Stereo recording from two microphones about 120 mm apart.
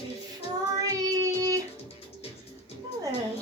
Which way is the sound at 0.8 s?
30° right (ahead or behind).